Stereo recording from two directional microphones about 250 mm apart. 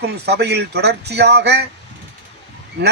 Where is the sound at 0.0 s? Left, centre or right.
Right.